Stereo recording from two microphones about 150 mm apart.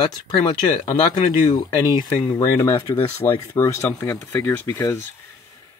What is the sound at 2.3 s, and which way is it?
Speech, 20° left (ahead or behind).